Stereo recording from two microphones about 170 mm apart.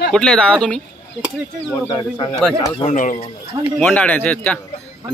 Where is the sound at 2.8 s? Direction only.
45° left (ahead or behind).